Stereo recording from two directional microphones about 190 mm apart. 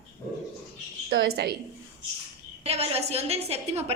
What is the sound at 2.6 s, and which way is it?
A woman's voice, 30° right (ahead or behind).